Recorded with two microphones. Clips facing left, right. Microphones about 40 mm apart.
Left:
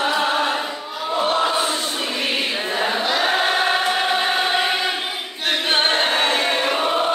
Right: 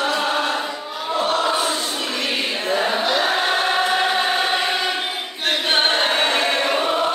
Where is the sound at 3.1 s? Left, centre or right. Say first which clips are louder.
Even; centre.